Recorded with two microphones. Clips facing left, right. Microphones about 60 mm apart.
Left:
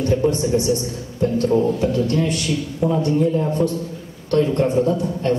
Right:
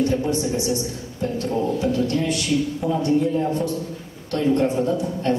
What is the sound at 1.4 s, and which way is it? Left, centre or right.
Speech, left.